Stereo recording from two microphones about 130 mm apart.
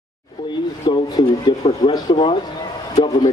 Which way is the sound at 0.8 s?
35° left (ahead or behind).